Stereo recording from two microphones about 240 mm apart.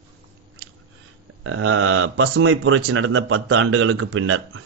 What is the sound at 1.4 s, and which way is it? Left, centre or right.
Speech, right.